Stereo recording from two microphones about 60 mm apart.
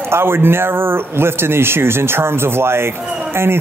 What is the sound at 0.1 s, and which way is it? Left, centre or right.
Speech, right.